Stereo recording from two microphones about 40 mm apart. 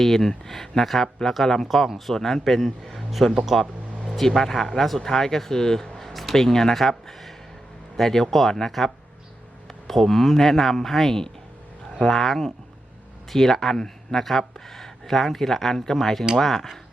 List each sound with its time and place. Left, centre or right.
0.0 s a man's voice: centre
4.2 s a man's voice: centre